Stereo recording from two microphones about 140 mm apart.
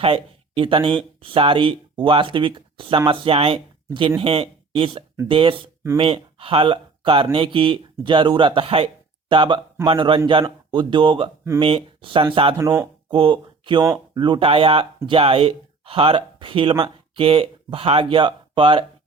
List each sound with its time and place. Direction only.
0.0 s speech: 40° right (ahead or behind)
12.5 s speech: 20° right (ahead or behind)
13.1 s speech: 35° right (ahead or behind)